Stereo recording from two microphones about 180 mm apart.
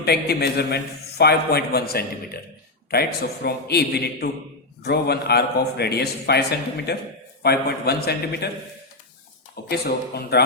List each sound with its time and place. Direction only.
0.0 s a man's voice: 65° left (ahead or behind)
9.6 s a man's voice: 60° left (ahead or behind)